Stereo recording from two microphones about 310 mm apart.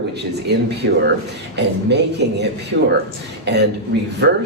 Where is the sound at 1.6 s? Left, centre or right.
Right.